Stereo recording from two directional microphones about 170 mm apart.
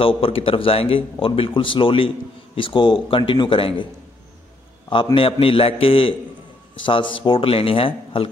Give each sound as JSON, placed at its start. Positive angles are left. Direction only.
{"t": 0.0, "sound": "a man's voice", "side_deg": 35}
{"t": 4.8, "sound": "a man's voice", "side_deg": 30}